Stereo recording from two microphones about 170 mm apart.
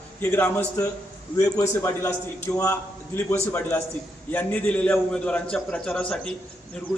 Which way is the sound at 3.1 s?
15° left (ahead or behind).